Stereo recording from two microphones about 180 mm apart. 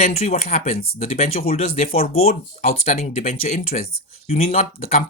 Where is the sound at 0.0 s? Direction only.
35° left (ahead or behind).